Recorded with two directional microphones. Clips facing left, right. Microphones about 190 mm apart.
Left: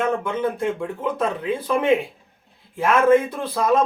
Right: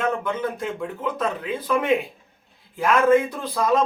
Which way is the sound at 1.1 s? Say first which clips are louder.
Left 3 dB; 25° left (ahead or behind).